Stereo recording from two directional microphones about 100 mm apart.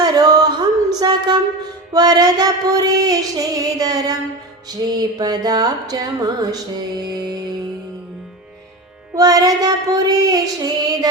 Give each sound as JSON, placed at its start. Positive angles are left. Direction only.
{"t": 0.0, "sound": "a sound", "side_deg": -40}
{"t": 1.9, "sound": "music", "side_deg": -40}
{"t": 9.1, "sound": "music", "side_deg": -40}